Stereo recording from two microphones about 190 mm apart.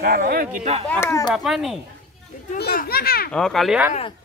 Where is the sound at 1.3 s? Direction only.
Centre (ahead or behind).